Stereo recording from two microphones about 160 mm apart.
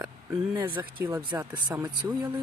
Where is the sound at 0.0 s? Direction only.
10° right (ahead or behind).